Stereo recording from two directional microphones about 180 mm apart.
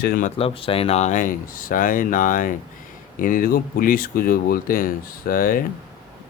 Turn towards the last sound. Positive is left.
turn(degrees=50)  # may be behind; listen again after turning